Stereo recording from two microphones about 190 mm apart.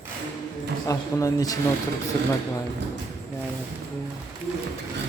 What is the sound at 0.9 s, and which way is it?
Speech, 20° left (ahead or behind).